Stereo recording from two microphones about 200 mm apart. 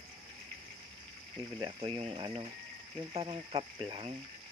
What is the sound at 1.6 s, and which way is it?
Speech, 20° right (ahead or behind).